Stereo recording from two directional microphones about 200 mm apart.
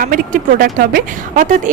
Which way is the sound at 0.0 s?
40° right (ahead or behind).